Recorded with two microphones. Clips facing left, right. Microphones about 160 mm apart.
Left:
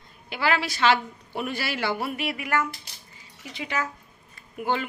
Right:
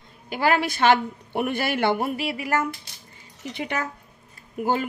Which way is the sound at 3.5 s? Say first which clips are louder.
Right 2 dB; 55° right (ahead or behind).